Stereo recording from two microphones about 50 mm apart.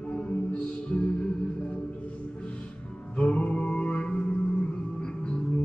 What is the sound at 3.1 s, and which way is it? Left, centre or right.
Music, left.